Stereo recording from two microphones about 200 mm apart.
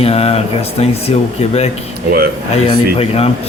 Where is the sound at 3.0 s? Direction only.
30° left (ahead or behind).